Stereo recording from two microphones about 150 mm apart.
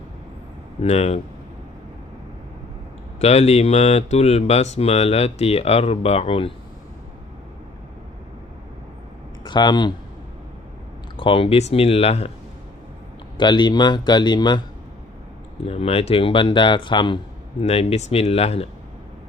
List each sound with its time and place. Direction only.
0.8 s speech: 45° left (ahead or behind)
3.2 s speech: 45° left (ahead or behind)
9.4 s speech: 30° left (ahead or behind)
11.2 s speech: 35° left (ahead or behind)
13.3 s a man's voice: 30° left (ahead or behind)
15.6 s speech: 40° left (ahead or behind)